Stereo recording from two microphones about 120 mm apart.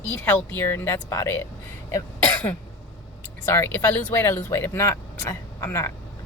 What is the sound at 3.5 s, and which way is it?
Speech, 20° left (ahead or behind).